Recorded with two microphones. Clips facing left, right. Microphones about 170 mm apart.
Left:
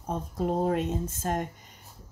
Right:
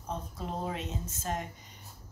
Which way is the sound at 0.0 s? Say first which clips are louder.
Left 8 dB; 50° left (ahead or behind).